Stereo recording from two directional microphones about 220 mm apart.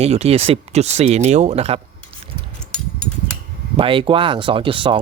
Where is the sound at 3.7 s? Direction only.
25° right (ahead or behind).